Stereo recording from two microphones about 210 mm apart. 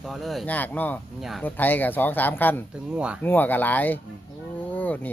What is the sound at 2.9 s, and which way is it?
Speech, 5° right (ahead or behind).